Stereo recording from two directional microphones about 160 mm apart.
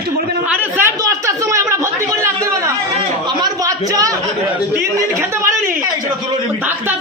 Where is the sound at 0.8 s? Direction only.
20° right (ahead or behind).